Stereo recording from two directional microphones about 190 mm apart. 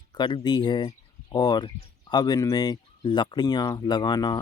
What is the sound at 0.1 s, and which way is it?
Speech, 25° left (ahead or behind).